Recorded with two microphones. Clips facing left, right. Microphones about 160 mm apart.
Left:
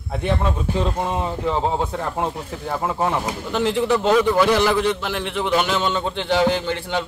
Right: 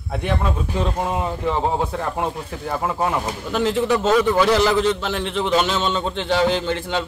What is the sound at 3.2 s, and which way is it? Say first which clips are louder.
Speech: even; 15° left (ahead or behind).